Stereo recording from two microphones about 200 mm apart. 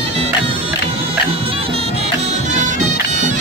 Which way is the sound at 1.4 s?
30° right (ahead or behind).